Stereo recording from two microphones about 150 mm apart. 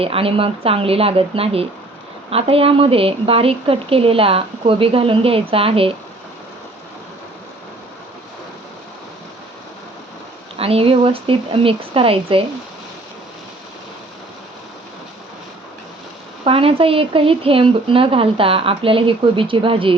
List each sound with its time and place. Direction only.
0.0 s a woman's voice: 40° right (ahead or behind)
10.6 s a woman's voice: 40° right (ahead or behind)
16.4 s a woman's voice: 40° right (ahead or behind)